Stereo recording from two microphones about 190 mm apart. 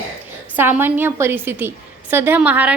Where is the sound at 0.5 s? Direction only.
10° right (ahead or behind).